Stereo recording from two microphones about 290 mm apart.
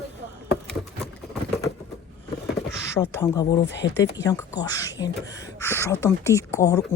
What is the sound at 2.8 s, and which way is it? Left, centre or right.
Speech, centre.